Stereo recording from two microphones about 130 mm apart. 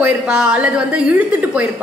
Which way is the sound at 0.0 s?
10° right (ahead or behind).